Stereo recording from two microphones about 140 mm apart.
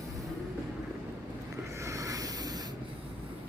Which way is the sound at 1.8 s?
20° right (ahead or behind).